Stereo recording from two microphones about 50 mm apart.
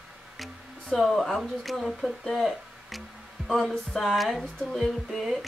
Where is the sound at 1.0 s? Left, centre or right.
Centre.